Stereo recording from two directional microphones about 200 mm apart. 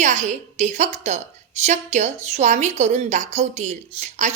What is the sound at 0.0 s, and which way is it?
A woman's voice, 35° right (ahead or behind).